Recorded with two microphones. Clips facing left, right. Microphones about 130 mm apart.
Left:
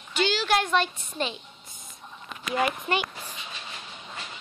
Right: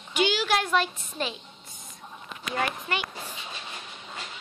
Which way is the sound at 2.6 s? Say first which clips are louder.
Left 4 dB; 15° left (ahead or behind).